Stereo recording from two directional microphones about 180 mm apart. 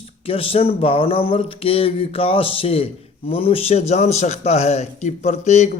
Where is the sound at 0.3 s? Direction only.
30° left (ahead or behind).